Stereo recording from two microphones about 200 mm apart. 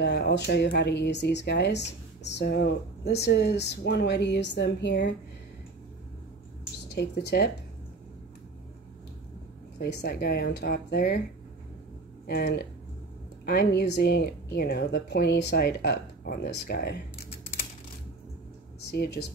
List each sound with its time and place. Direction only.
0.0 s speech: 55° left (ahead or behind)
7.0 s speech: 55° left (ahead or behind)
9.8 s a woman's voice: 55° left (ahead or behind)
12.3 s a woman's voice: 50° left (ahead or behind)
18.9 s speech: 55° left (ahead or behind)